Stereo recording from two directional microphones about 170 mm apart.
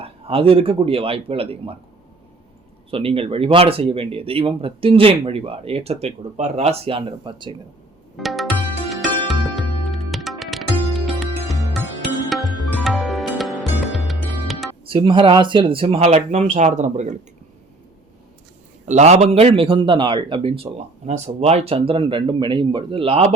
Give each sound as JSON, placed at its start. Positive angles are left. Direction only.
{"t": 0.0, "sound": "speech", "side_deg": -35}
{"t": 2.9, "sound": "speech", "side_deg": -35}
{"t": 8.1, "sound": "music", "side_deg": 0}
{"t": 14.8, "sound": "speech", "side_deg": -30}
{"t": 18.9, "sound": "speech", "side_deg": -40}